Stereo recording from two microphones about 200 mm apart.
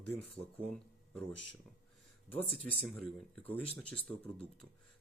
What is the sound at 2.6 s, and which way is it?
Speech, 5° left (ahead or behind).